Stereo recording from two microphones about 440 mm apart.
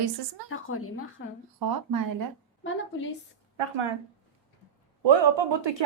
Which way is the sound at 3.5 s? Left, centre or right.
Right.